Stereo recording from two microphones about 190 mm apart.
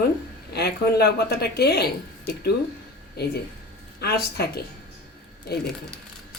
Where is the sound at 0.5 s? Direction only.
60° left (ahead or behind).